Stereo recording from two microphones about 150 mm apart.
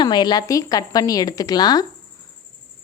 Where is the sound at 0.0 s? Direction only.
30° left (ahead or behind).